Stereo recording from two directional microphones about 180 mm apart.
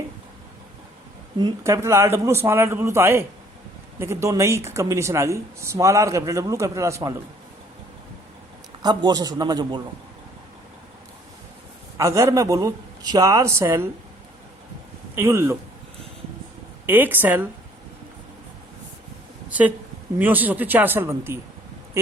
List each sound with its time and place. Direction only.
1.4 s speech: 20° right (ahead or behind)
8.8 s a man's voice: 25° right (ahead or behind)
11.9 s speech: 15° right (ahead or behind)
15.1 s speech: 15° right (ahead or behind)
16.8 s speech: 10° right (ahead or behind)
19.5 s speech: 10° right (ahead or behind)